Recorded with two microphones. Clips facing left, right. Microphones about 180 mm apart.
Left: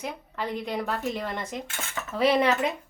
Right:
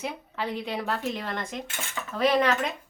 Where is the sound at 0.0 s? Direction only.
5° right (ahead or behind).